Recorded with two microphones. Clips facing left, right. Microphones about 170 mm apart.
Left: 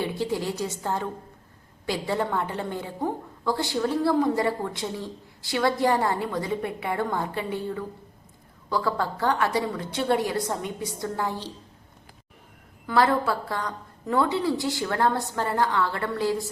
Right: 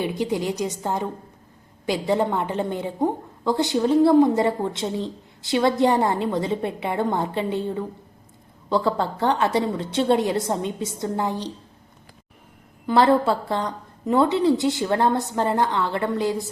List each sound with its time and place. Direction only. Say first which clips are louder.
0.0 s a woman's voice: right 3 dB; 20° right (ahead or behind)
12.9 s a woman's voice: right 5 dB; 25° right (ahead or behind)